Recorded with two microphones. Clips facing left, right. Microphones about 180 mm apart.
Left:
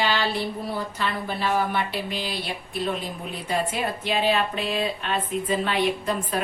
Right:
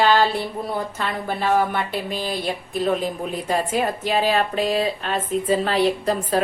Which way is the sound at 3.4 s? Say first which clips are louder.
Right 3 dB; 45° right (ahead or behind).